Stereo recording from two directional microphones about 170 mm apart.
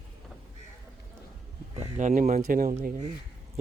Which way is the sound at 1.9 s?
45° right (ahead or behind).